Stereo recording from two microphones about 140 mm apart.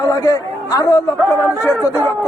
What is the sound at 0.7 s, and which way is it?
A man's voice, 25° left (ahead or behind).